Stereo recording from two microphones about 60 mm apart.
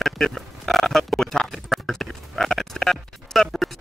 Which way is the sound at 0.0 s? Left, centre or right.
Centre.